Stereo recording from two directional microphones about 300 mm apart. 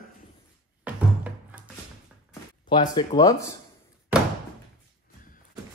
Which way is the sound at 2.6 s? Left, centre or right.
Centre.